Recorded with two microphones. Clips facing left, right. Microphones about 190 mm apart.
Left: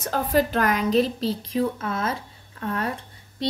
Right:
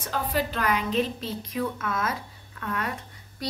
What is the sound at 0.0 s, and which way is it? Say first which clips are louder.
A woman's voice: left 6 dB; 45° left (ahead or behind).